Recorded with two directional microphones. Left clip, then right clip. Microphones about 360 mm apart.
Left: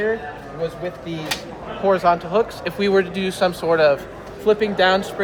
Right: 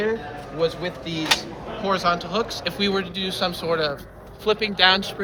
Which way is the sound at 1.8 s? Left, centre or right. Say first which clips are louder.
Left 5 dB; centre.